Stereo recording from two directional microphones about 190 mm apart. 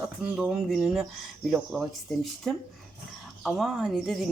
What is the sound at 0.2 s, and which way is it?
Speech, 5° right (ahead or behind).